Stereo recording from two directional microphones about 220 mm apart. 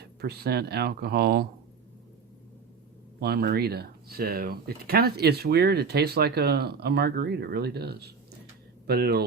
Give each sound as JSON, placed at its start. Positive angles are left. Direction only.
{"t": 0.2, "sound": "speech", "side_deg": -45}
{"t": 3.2, "sound": "speech", "side_deg": -45}